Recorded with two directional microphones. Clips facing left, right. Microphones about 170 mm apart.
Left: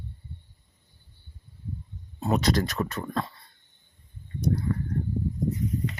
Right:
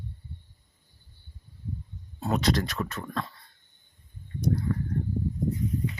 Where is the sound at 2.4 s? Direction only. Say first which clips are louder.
Left 2 dB; 40° left (ahead or behind).